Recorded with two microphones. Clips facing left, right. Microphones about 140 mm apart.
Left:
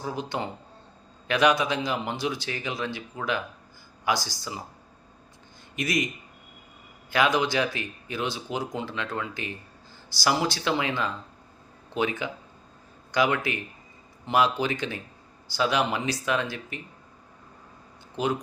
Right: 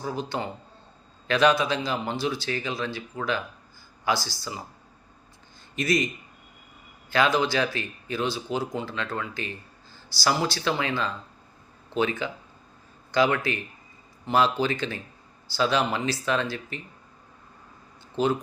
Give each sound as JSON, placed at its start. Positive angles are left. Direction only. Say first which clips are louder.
{"t": 0.2, "sound": "speech", "louder": "right 1 dB", "side_deg": 20}
{"t": 5.7, "sound": "speech", "louder": "right 3 dB", "side_deg": 15}
{"t": 7.1, "sound": "speech", "louder": "right 1 dB", "side_deg": 15}
{"t": 18.2, "sound": "speech", "louder": "right 3 dB", "side_deg": 10}